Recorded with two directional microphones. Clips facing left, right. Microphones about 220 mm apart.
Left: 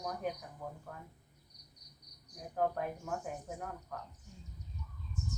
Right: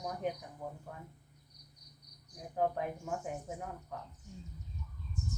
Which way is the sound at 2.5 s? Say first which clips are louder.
Right 1 dB; 15° right (ahead or behind).